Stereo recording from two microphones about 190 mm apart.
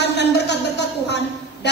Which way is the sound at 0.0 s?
65° left (ahead or behind).